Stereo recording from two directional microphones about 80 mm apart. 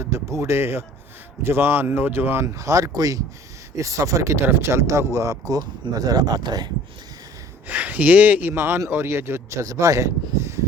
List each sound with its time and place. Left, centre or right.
0.0 s speech: right
4.4 s speech: right
7.7 s speech: right